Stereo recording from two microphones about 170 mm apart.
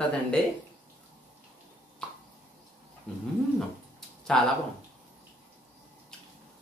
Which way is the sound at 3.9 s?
5° left (ahead or behind).